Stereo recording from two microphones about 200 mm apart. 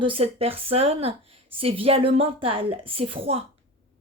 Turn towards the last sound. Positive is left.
turn(degrees=-30)  # may be behind; listen again after turning